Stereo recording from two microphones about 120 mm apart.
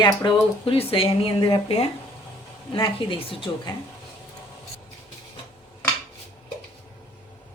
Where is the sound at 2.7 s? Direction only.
45° left (ahead or behind).